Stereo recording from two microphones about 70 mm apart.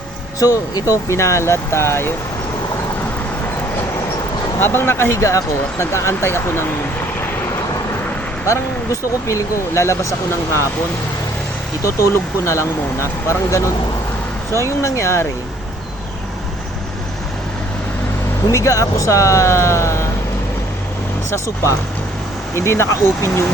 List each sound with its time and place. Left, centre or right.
0.3 s speech: left
1.0 s speech: left
4.6 s speech: left
8.4 s speech: left
11.8 s speech: left
18.5 s speech: left
21.2 s speech: left